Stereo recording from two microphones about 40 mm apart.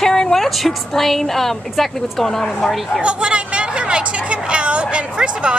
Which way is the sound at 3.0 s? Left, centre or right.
Right.